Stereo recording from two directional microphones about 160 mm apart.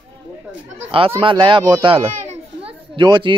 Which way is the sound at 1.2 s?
30° right (ahead or behind).